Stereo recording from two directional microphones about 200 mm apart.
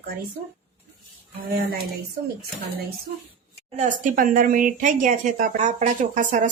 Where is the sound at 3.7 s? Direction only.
35° right (ahead or behind).